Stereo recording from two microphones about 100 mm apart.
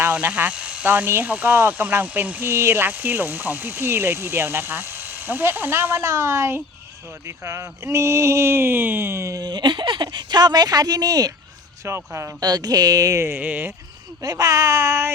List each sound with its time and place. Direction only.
0.0 s speech: 15° right (ahead or behind); by 11.3 s 35° right (ahead or behind)
11.9 s speech: 25° right (ahead or behind)
12.4 s speech: 40° right (ahead or behind); by 13.7 s 20° right (ahead or behind)
14.2 s speech: 35° right (ahead or behind)